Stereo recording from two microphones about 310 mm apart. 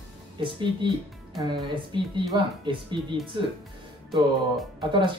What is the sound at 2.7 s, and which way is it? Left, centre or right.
Speech, centre.